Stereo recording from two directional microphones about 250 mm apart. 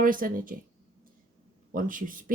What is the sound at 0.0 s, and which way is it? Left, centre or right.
Speech, right.